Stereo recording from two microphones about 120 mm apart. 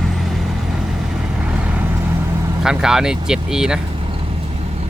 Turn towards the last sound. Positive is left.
turn(degrees=-5)  # may be behind; listen again after turning